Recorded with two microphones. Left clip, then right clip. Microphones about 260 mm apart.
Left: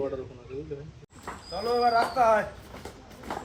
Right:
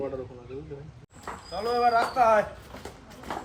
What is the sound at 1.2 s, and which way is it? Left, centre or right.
Speech, centre.